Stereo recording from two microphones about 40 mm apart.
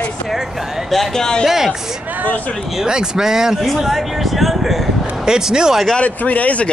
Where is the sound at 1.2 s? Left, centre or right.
Centre.